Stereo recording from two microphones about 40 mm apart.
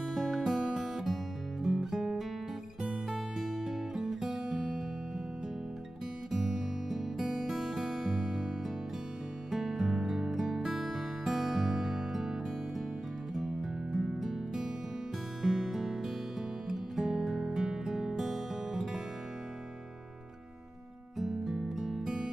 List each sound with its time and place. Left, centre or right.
0.0 s music: centre
6.5 s music: centre
13.3 s music: centre
21.2 s music: centre